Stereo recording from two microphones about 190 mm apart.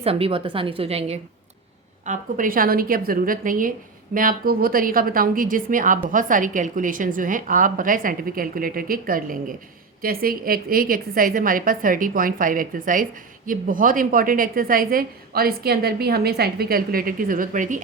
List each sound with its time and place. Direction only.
0.0 s a woman's voice: 30° right (ahead or behind)
2.0 s a woman's voice: 45° right (ahead or behind)